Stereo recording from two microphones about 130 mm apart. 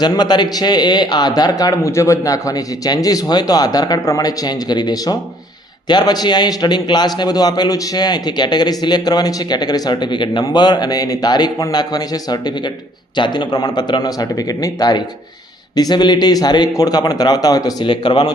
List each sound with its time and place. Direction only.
0.0 s a man's voice: 35° left (ahead or behind)